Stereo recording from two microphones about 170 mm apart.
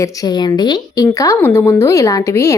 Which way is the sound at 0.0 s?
20° left (ahead or behind).